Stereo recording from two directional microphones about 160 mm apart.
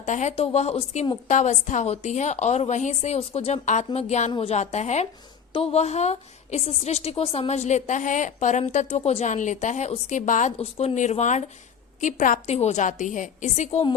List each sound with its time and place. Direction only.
0.0 s a woman's voice: 50° left (ahead or behind)
1.3 s a woman's voice: 50° left (ahead or behind)
10.6 s a woman's voice: 40° left (ahead or behind)